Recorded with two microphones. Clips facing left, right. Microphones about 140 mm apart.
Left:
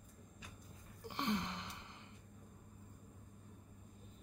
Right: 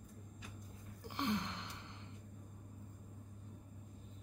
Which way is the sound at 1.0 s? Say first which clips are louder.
Right 1 dB; centre (ahead or behind).